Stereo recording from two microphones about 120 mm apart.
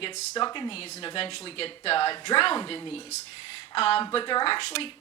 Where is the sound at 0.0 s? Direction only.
40° left (ahead or behind).